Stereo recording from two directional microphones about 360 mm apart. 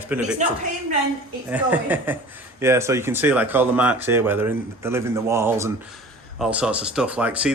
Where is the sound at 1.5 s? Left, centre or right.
Centre.